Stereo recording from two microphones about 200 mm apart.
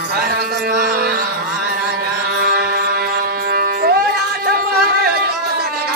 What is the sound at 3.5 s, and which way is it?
Music, 50° right (ahead or behind).